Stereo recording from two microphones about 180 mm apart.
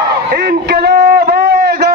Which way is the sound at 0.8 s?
60° right (ahead or behind).